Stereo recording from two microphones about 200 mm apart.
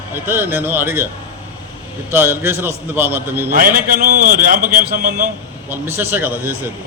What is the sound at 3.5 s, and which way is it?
A man's voice, 45° right (ahead or behind).